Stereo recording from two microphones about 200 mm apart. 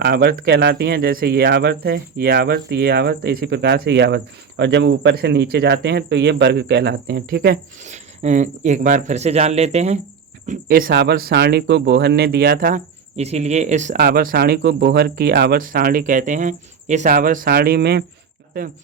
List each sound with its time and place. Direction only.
0.0 s speech: 55° right (ahead or behind); by 14.0 s 35° right (ahead or behind)
14.0 s speech: 45° right (ahead or behind)